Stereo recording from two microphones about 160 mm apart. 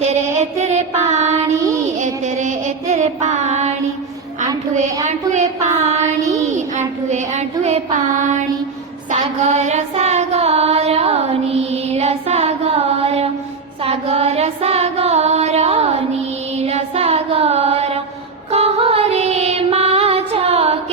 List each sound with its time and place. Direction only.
0.0 s child singing: 45° right (ahead or behind)
2.0 s music: 50° right (ahead or behind)
5.0 s a sound: 45° right (ahead or behind)
6.4 s child singing: 45° right (ahead or behind)
9.1 s female singing: 45° right (ahead or behind)
13.8 s music: 40° right (ahead or behind)
16.6 s child singing: 40° right (ahead or behind)
18.5 s female singing: 40° right (ahead or behind)